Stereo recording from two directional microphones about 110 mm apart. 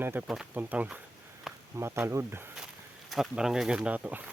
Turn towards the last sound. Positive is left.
turn(degrees=-15)  # may be behind; listen again after turning